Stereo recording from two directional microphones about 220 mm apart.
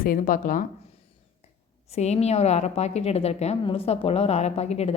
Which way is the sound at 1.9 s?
30° left (ahead or behind).